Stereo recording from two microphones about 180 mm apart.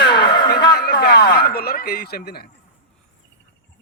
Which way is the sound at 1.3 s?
55° left (ahead or behind).